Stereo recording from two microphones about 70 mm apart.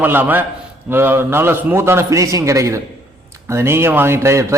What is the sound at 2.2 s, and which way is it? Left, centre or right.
A man's voice, right.